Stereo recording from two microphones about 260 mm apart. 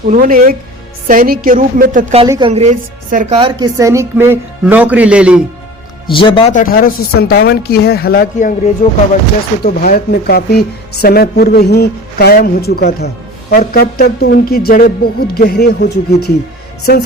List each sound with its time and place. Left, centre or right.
0.1 s a woman's voice: right
2.2 s a woman's voice: centre
2.5 s a woman's voice: right; by 5.4 s centre
6.1 s a woman's voice: centre; by 16.3 s left